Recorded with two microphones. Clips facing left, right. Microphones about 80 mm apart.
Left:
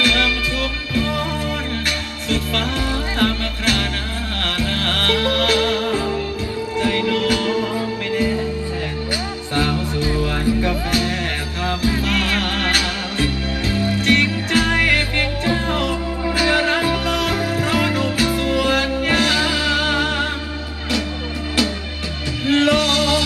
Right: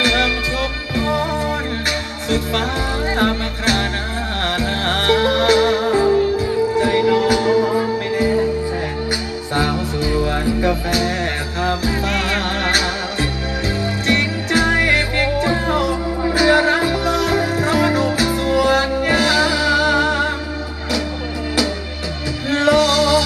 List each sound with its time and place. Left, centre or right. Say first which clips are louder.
0.0 s music: right 1 dB; right
2.2 s music: right 2 dB; right
9.6 s music: right 1 dB; centre
22.5 s music: right 2 dB; right